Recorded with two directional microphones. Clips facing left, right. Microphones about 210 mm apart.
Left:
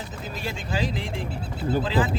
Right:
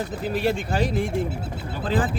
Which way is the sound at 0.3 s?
60° right (ahead or behind).